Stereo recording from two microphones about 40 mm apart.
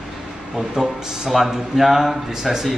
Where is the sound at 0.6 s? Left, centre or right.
Centre.